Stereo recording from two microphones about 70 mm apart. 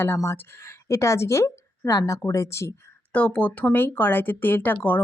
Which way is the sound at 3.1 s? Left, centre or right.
Centre.